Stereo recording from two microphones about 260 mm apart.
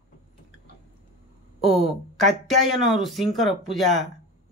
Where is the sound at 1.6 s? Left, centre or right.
Centre.